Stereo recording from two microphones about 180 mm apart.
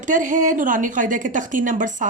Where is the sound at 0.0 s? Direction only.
45° right (ahead or behind).